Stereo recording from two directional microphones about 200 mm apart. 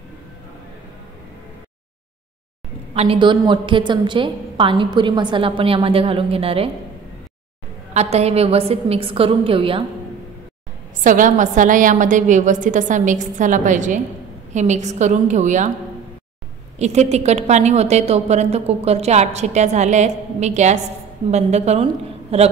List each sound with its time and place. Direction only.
2.9 s a woman's voice: 30° right (ahead or behind)
7.9 s a woman's voice: 35° right (ahead or behind)
11.1 s a woman's voice: 40° right (ahead or behind)
16.7 s a woman's voice: 35° right (ahead or behind)